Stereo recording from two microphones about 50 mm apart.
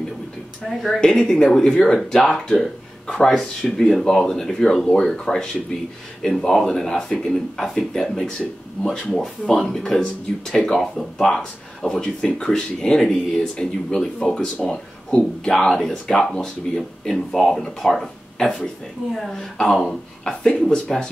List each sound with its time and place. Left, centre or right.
0.7 s speech: centre
3.3 s speech: centre
20.4 s speech: left